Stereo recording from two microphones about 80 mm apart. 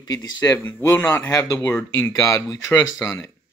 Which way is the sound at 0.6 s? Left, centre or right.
Left.